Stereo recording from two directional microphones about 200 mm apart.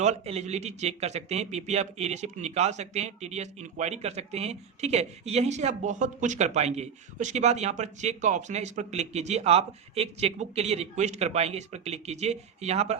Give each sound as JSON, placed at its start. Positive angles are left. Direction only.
{"t": 0.0, "sound": "speech", "side_deg": -30}